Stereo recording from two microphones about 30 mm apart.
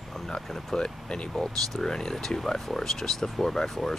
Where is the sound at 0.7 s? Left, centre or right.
Left.